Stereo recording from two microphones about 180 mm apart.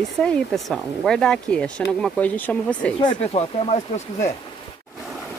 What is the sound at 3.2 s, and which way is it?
Speech, 35° left (ahead or behind).